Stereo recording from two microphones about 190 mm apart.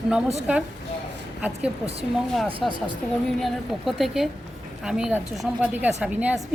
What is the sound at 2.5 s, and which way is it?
Speech, 25° right (ahead or behind).